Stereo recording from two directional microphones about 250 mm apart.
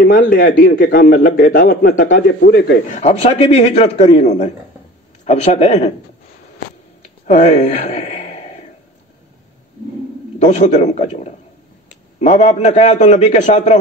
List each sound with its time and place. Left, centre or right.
0.0 s a man's voice: left
2.9 s a man's voice: left
7.2 s a sound: left
10.4 s a man's voice: left